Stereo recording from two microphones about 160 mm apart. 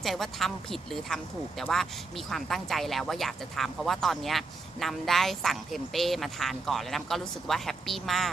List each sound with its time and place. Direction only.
0.0 s speech: centre (ahead or behind)